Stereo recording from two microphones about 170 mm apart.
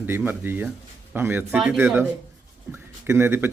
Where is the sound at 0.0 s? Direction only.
10° right (ahead or behind).